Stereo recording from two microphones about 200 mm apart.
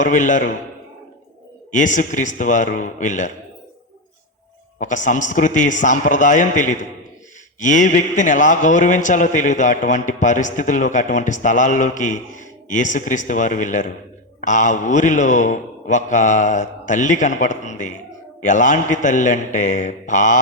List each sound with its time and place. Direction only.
0.0 s a man's voice: 40° left (ahead or behind)
1.7 s a man's voice: 40° left (ahead or behind)
4.8 s a man's voice: 40° left (ahead or behind)